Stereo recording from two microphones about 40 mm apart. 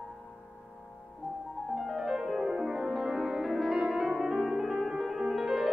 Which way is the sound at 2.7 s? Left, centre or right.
Centre.